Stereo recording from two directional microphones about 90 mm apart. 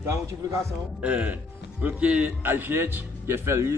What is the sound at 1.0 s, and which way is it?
A man's voice, 15° right (ahead or behind).